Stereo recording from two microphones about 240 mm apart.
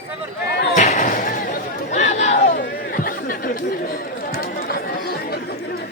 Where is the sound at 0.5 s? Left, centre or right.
Left.